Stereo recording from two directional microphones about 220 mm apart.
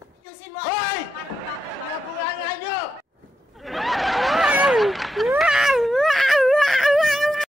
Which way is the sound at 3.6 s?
Centre (ahead or behind).